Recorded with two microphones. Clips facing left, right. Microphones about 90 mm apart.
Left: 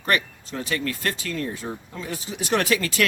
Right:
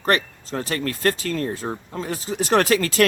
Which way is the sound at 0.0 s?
40° right (ahead or behind).